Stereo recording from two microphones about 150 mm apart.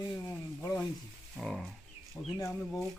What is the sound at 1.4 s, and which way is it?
Speech, centre (ahead or behind).